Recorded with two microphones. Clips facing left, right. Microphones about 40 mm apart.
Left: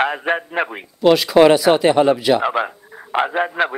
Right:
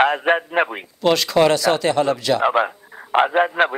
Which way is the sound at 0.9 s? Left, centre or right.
Centre.